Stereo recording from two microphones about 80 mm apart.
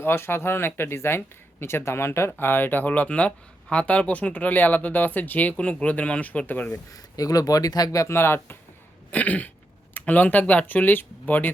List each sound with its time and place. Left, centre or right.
0.0 s speech: left
6.9 s speech: left
8.0 s speech: left
9.0 s a sound: centre
9.9 s speech: centre